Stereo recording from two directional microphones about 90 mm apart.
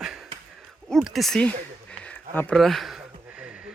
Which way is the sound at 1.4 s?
10° left (ahead or behind).